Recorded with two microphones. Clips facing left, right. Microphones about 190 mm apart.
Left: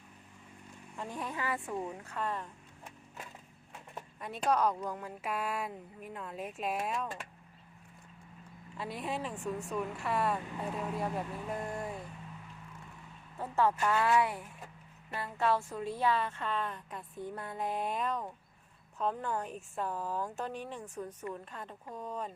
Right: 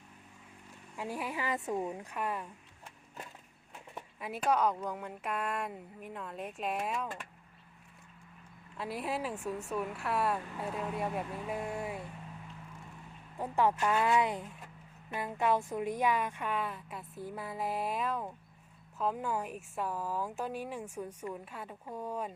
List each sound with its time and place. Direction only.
0.9 s speech: 5° right (ahead or behind)
4.2 s speech: 5° right (ahead or behind)
8.8 s speech: centre (ahead or behind)
13.4 s speech: 15° right (ahead or behind)